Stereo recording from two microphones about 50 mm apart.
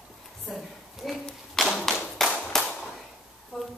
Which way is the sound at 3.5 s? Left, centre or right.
Centre.